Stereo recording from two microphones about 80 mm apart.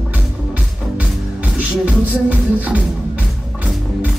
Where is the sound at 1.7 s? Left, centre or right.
Centre.